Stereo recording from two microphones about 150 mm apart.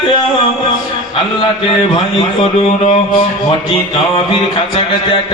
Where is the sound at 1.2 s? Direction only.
40° left (ahead or behind).